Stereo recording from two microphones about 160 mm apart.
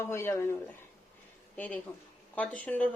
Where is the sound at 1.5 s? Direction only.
10° left (ahead or behind).